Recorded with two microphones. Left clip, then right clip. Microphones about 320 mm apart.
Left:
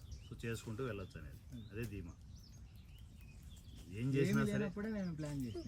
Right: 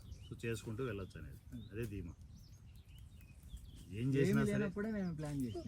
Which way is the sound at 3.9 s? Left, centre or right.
Centre.